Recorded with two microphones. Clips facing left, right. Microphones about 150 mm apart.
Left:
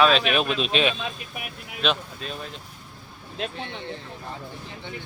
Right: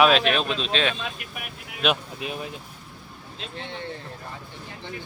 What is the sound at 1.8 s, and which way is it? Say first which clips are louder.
Speech: right 1 dB; 10° right (ahead or behind).